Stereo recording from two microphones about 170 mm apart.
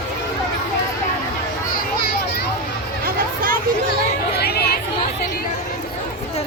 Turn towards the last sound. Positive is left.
turn(degrees=65)  # may be behind; listen again after turning